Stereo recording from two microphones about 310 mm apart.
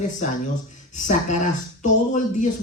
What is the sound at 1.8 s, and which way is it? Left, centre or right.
Speech, left.